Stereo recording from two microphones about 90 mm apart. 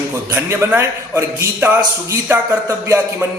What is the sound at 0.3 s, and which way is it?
A man's voice, 25° right (ahead or behind).